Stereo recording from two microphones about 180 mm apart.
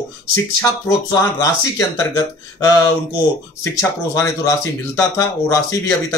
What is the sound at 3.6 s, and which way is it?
Speech, 15° left (ahead or behind).